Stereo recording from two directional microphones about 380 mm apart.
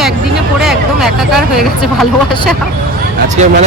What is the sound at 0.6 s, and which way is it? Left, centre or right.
Speech, centre.